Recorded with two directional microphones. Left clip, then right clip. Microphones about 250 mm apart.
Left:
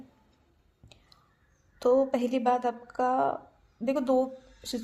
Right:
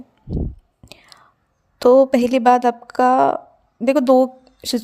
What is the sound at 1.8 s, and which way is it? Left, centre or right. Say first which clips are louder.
A woman's voice: right 12 dB; right.